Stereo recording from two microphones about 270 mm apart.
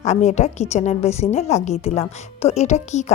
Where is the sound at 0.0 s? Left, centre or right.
Left.